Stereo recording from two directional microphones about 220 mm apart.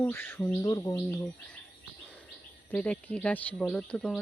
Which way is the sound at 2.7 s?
5° left (ahead or behind).